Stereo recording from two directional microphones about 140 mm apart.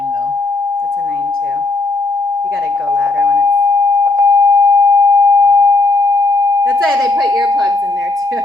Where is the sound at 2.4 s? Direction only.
15° right (ahead or behind).